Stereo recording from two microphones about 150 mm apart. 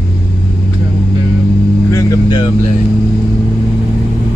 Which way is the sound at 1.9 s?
20° left (ahead or behind).